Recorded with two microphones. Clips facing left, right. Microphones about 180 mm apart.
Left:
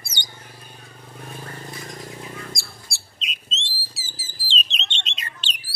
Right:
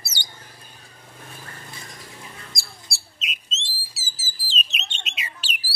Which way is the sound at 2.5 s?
Centre (ahead or behind).